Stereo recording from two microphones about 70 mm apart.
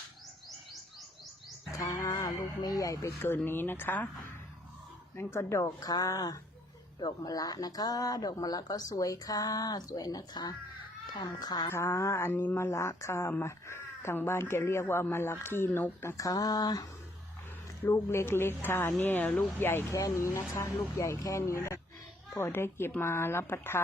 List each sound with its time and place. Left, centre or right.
1.7 s a sound: left
2.6 s speech: left
3.2 s speech: left
5.1 s speech: left
5.9 s a woman's voice: left
11.7 s speech: left
16.1 s speech: left
17.8 s speech: left
19.9 s speech: left